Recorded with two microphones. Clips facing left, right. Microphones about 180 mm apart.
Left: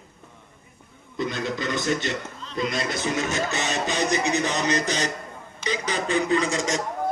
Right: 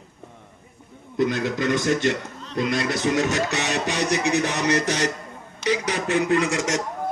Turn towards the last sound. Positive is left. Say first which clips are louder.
# right 2 dB
turn(degrees=-70)  # may be behind; listen again after turning